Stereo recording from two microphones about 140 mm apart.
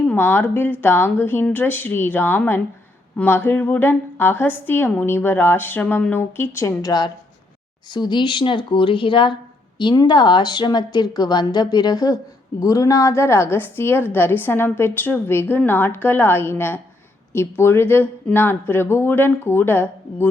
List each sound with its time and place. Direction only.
0.0 s speech: 10° left (ahead or behind)